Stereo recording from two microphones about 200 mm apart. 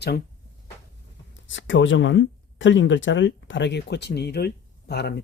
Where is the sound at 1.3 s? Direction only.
70° left (ahead or behind).